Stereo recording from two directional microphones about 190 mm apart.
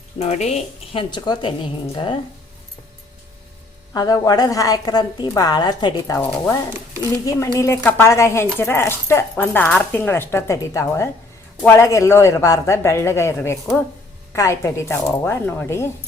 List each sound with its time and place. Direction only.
0.2 s a woman's voice: 35° left (ahead or behind)
3.9 s a woman's voice: 20° left (ahead or behind)
6.1 s speech: 10° left (ahead or behind)